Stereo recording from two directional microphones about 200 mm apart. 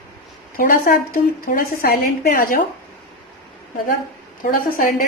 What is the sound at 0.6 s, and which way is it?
Speech, 45° left (ahead or behind).